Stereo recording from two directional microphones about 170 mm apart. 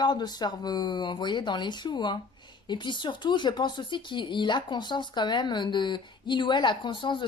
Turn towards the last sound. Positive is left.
turn(degrees=30)  # may be behind; listen again after turning